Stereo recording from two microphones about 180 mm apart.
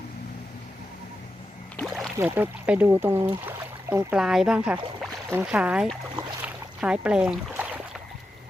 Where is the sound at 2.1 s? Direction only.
15° right (ahead or behind).